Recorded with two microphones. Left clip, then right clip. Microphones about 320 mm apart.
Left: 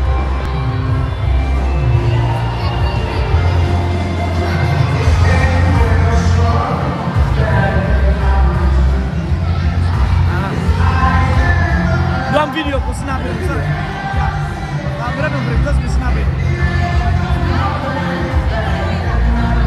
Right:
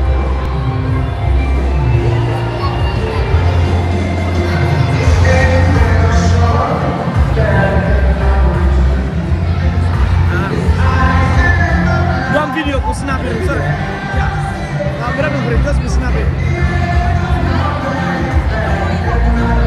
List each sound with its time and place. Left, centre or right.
12.3 s music: centre